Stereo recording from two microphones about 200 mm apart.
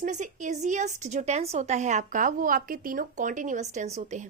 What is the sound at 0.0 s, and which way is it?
Speech, 40° right (ahead or behind).